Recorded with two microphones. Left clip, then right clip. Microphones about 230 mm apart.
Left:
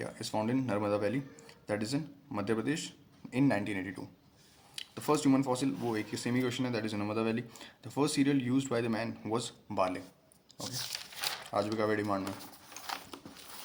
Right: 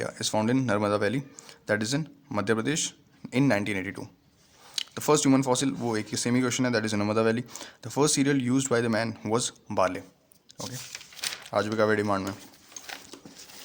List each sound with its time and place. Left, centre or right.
0.0 s speech: right
11.7 s speech: right